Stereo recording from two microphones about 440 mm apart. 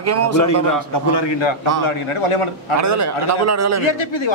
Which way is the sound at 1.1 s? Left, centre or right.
Left.